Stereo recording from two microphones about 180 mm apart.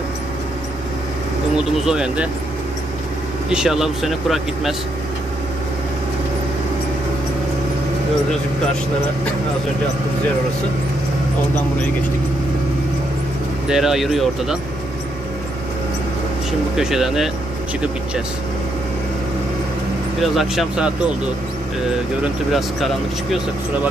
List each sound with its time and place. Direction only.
1.9 s speech: 5° right (ahead or behind)
3.4 s speech: 5° right (ahead or behind)
13.7 s speech: centre (ahead or behind)
16.7 s speech: 5° right (ahead or behind)
20.2 s speech: centre (ahead or behind)
22.2 s speech: centre (ahead or behind)